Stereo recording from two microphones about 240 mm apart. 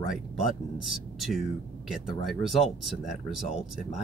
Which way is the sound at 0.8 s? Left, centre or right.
Centre.